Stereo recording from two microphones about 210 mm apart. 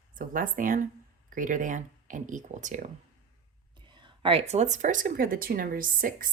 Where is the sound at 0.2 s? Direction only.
40° right (ahead or behind).